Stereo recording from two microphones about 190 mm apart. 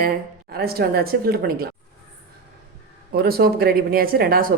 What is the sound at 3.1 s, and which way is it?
A woman's voice, 55° right (ahead or behind).